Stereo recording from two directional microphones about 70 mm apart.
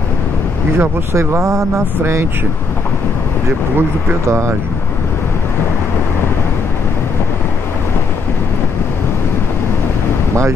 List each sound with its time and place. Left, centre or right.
0.7 s speech: right
4.3 s speech: right